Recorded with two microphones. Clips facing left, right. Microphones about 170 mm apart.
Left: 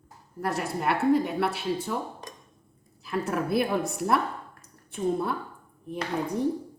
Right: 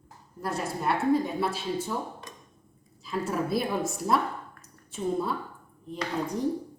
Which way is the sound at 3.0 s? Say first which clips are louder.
Left 1 dB; 60° left (ahead or behind).